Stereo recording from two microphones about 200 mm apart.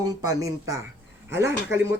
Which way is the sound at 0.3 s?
15° right (ahead or behind).